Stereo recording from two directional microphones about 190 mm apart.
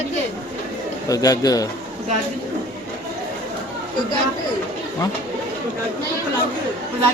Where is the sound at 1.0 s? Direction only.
20° left (ahead or behind).